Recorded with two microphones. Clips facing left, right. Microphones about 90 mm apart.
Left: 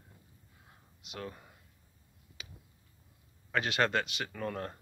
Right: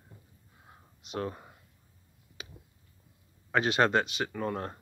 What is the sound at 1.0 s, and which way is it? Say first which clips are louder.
Speech: right 8 dB; 30° right (ahead or behind).